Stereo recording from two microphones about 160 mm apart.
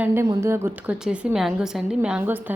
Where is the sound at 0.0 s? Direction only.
15° right (ahead or behind).